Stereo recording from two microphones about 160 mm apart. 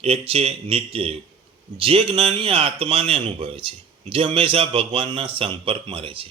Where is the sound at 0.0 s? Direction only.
40° right (ahead or behind).